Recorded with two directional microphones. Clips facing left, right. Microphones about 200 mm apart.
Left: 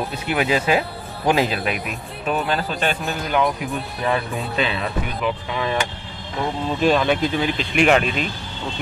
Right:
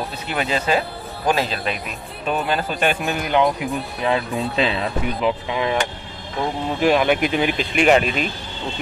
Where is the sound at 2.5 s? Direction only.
15° right (ahead or behind).